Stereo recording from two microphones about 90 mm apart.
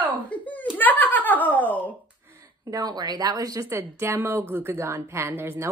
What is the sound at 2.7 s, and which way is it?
A woman's voice, 45° right (ahead or behind).